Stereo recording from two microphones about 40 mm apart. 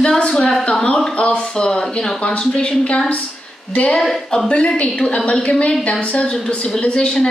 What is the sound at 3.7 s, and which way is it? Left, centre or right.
A woman's voice, left.